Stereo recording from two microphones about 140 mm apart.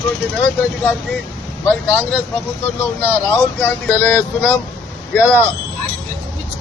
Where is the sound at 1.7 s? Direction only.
15° left (ahead or behind).